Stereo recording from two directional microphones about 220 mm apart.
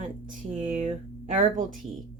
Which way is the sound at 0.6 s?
35° right (ahead or behind).